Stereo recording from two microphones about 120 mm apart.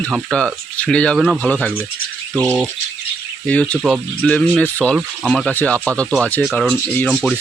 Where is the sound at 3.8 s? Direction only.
Centre (ahead or behind).